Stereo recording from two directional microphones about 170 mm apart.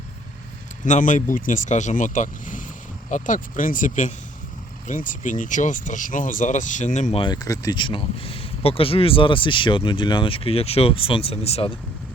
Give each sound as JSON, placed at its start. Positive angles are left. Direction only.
{"t": 0.9, "sound": "speech", "side_deg": 50}